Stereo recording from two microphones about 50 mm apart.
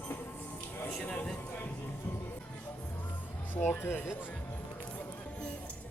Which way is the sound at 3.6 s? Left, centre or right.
Left.